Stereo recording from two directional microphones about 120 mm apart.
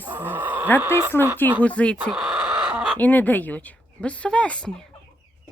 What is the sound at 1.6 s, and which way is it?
Speech, 10° left (ahead or behind).